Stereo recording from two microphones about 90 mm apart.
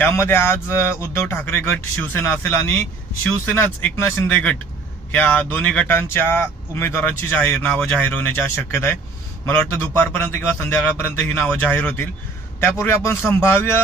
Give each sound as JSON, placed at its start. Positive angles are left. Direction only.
{"t": 0.0, "sound": "speech", "side_deg": 30}
{"t": 5.9, "sound": "speech", "side_deg": 25}